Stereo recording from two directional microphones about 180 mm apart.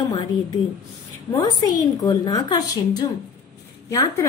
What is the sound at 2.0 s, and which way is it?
Speech, 20° left (ahead or behind).